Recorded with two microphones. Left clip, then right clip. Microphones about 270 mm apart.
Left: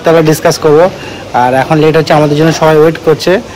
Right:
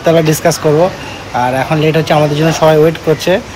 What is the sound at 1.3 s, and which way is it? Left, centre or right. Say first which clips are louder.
Speech: left 5 dB; left.